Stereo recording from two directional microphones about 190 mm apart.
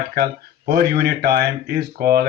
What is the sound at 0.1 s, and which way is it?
Speech, 55° right (ahead or behind).